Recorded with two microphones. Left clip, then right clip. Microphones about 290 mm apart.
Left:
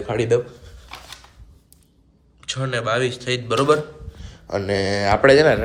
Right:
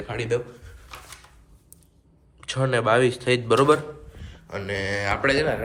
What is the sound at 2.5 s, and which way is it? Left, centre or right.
A man's voice, centre.